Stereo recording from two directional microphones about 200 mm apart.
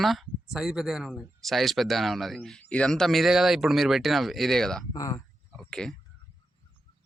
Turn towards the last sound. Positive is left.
turn(degrees=5)  # may be behind; listen again after turning